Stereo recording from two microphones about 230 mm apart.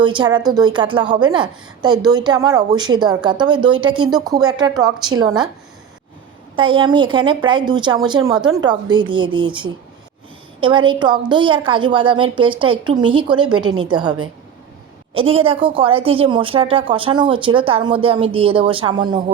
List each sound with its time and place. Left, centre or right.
0.0 s a woman's voice: centre
6.6 s a woman's voice: right